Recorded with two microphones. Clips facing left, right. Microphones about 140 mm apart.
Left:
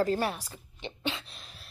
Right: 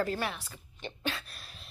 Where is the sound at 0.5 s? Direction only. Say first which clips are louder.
Left 2 dB; 20° left (ahead or behind).